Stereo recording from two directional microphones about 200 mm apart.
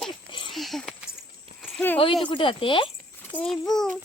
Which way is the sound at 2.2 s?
25° left (ahead or behind).